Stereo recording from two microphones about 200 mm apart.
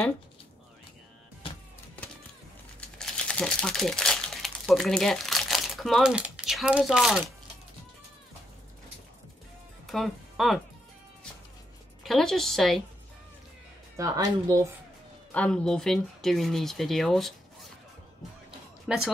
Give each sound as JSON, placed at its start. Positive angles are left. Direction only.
{"t": 3.0, "sound": "speech", "side_deg": 5}
{"t": 9.8, "sound": "speech", "side_deg": 0}
{"t": 12.0, "sound": "speech", "side_deg": 0}
{"t": 13.9, "sound": "a woman's voice", "side_deg": -15}
{"t": 15.3, "sound": "speech", "side_deg": 5}
{"t": 18.9, "sound": "speech", "side_deg": -5}